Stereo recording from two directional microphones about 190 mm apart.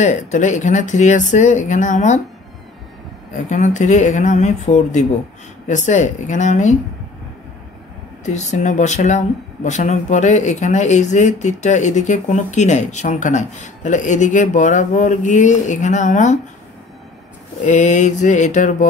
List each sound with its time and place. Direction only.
0.0 s speech: 40° left (ahead or behind)
3.4 s speech: 40° left (ahead or behind)
8.3 s speech: 40° left (ahead or behind)
17.6 s speech: 40° left (ahead or behind)